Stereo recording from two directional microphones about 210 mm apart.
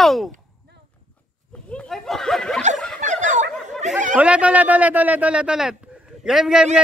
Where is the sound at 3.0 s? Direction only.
35° right (ahead or behind).